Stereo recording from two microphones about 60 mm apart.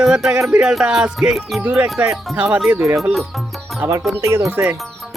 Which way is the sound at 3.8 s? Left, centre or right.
Right.